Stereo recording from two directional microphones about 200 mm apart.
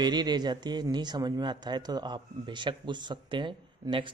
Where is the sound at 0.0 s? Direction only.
20° right (ahead or behind).